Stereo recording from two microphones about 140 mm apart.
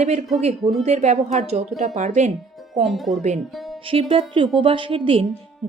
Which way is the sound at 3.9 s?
45° right (ahead or behind).